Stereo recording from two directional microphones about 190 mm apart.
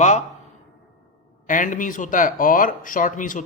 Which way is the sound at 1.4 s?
45° left (ahead or behind).